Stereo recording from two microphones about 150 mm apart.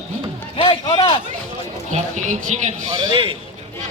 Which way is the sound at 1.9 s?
55° right (ahead or behind).